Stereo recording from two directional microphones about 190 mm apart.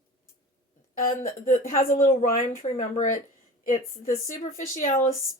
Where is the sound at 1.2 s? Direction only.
40° left (ahead or behind).